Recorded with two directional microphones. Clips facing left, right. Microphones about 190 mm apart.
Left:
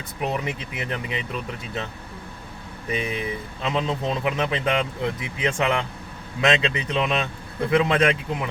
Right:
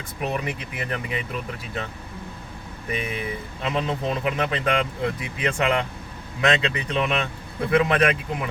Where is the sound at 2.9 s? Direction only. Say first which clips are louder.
Left 2 dB; 25° left (ahead or behind).